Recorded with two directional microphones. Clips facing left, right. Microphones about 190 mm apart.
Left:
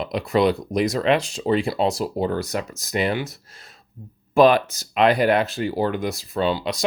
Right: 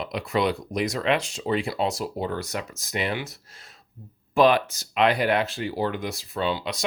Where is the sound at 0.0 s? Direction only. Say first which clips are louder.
Left 5 dB; 35° left (ahead or behind).